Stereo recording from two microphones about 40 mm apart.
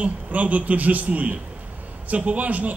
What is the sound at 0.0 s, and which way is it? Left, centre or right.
A man's voice, right.